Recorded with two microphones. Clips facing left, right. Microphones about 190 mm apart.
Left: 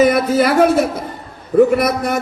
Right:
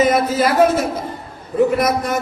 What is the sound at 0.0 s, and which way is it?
A man's voice, 65° left (ahead or behind).